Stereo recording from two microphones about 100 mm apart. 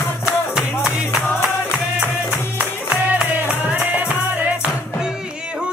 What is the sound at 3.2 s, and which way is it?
Music, 15° right (ahead or behind).